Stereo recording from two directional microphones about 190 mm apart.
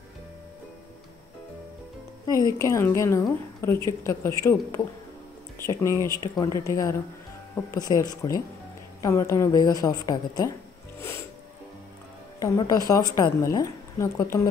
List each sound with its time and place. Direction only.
2.6 s a woman's voice: 15° left (ahead or behind)
11.0 s music: 15° left (ahead or behind)
12.4 s a woman's voice: 15° left (ahead or behind)